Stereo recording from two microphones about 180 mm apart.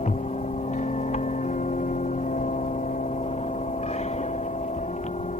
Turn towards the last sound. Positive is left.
turn(degrees=40)  # may be behind; listen again after turning